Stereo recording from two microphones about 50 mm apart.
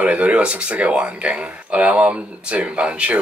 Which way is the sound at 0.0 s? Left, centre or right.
Right.